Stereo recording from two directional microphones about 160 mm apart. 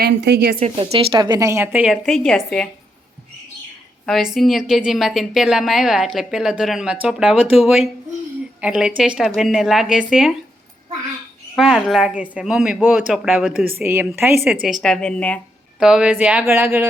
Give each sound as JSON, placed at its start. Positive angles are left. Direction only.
{"t": 0.0, "sound": "speech", "side_deg": -90}
{"t": 0.8, "sound": "a woman's voice", "side_deg": -30}
{"t": 4.0, "sound": "a woman's voice", "side_deg": 0}
{"t": 11.5, "sound": "a woman's voice", "side_deg": 0}
{"t": 15.8, "sound": "a woman's voice", "side_deg": -5}